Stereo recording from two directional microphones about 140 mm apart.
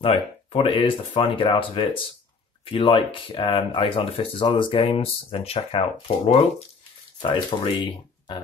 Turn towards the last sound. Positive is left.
turn(degrees=35)  # may be behind; listen again after turning